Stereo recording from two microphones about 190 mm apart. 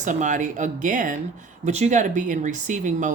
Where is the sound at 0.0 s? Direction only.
40° right (ahead or behind).